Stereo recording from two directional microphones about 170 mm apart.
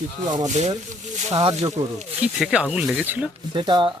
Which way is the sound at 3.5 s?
25° right (ahead or behind).